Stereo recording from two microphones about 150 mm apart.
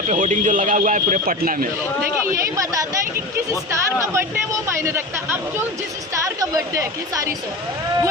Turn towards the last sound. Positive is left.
turn(degrees=-20)  # may be behind; listen again after turning